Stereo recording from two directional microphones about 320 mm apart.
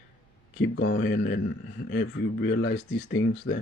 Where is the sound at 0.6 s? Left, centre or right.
Left.